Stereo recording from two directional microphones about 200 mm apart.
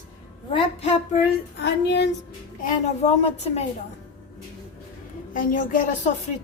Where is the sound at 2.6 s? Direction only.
35° left (ahead or behind).